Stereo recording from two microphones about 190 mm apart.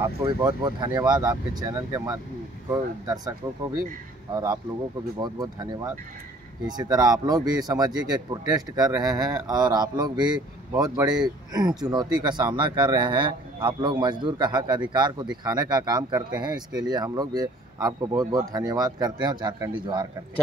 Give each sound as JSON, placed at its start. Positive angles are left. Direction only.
{"t": 0.0, "sound": "a man's voice", "side_deg": -15}